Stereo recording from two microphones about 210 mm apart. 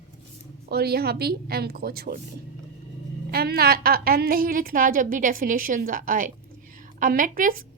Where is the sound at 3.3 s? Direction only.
50° right (ahead or behind).